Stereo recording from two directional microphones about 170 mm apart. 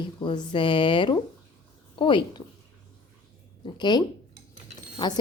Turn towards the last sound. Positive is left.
turn(degrees=25)  # may be behind; listen again after turning